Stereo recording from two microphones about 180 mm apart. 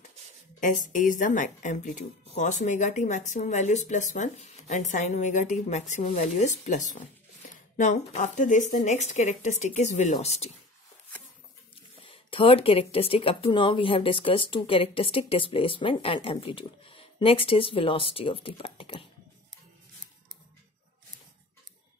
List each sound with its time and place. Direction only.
0.6 s speech: 45° left (ahead or behind)
12.0 s speech: 30° left (ahead or behind)